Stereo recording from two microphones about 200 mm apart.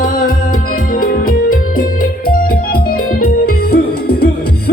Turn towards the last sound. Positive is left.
turn(degrees=55)  # may be behind; listen again after turning